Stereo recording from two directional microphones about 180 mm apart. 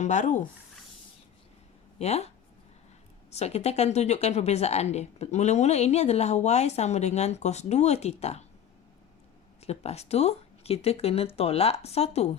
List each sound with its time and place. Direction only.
0.0 s speech: 40° left (ahead or behind)
2.0 s a woman's voice: 35° left (ahead or behind)
9.6 s a woman's voice: 35° left (ahead or behind)